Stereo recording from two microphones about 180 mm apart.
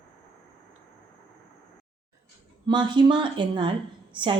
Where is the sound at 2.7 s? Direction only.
25° right (ahead or behind).